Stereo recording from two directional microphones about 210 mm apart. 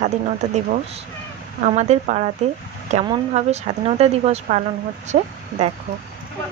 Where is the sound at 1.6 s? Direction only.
35° right (ahead or behind).